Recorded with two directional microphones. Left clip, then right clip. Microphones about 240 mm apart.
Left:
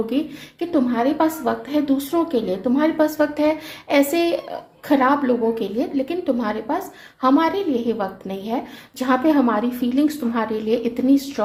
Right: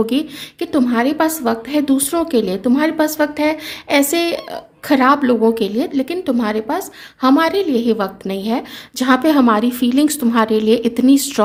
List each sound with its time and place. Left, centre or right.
0.0 s a woman's voice: right